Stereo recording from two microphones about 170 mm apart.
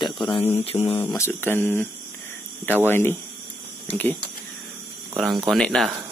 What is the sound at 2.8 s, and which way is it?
Speech, 15° left (ahead or behind).